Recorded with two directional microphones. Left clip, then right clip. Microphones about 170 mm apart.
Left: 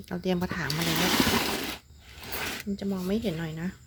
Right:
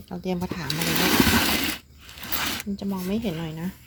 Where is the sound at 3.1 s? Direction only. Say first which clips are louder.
Right 1 dB; 10° left (ahead or behind).